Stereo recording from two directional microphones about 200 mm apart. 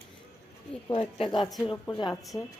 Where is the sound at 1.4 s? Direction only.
Centre (ahead or behind).